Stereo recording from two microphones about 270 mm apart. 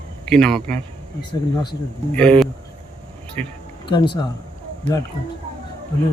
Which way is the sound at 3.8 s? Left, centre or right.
Centre.